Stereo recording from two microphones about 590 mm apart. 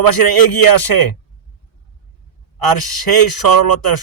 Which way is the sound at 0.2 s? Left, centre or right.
Left.